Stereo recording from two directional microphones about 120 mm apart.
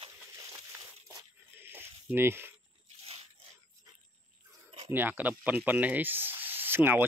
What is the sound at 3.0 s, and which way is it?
Crunch, 55° right (ahead or behind).